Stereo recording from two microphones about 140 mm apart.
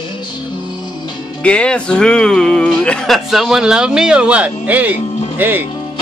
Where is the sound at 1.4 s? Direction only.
5° left (ahead or behind).